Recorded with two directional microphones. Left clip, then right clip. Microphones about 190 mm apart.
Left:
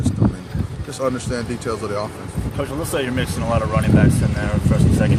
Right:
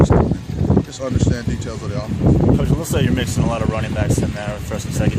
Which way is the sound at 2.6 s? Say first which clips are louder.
Right 1 dB; 60° right (ahead or behind).